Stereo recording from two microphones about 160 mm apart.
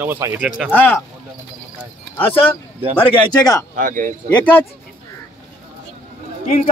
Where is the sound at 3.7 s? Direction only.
55° right (ahead or behind).